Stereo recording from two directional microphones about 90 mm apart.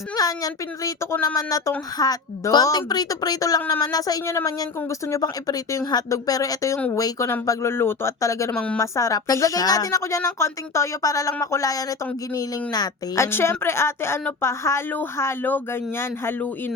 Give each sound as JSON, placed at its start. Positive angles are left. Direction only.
{"t": 0.2, "sound": "a woman's voice", "side_deg": 40}
{"t": 8.5, "sound": "a woman's voice", "side_deg": 15}
{"t": 8.8, "sound": "a woman's voice", "side_deg": 35}
{"t": 13.1, "sound": "a woman's voice", "side_deg": 30}